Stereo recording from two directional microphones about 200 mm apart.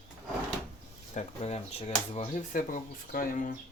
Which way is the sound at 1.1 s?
35° left (ahead or behind).